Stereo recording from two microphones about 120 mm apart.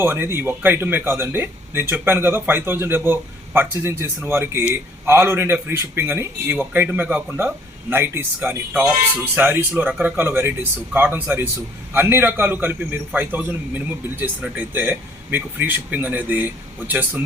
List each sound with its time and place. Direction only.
0.0 s a man's voice: 20° right (ahead or behind)